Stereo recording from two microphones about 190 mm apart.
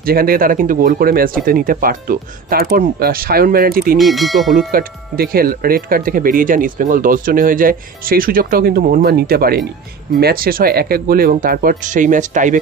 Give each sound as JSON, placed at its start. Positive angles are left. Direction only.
{"t": 0.0, "sound": "speech", "side_deg": -50}
{"t": 4.0, "sound": "speech", "side_deg": 0}
{"t": 4.6, "sound": "speech", "side_deg": -50}